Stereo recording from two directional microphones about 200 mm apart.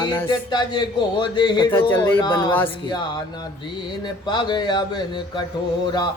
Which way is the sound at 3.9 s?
20° left (ahead or behind).